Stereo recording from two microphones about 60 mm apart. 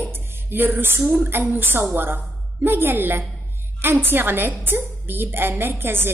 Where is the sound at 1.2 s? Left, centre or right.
Right.